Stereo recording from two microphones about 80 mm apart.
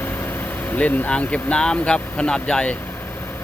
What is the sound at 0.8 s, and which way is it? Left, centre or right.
Speech, centre.